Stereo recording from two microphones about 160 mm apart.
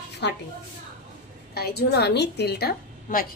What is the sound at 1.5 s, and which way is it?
A woman's voice, 80° left.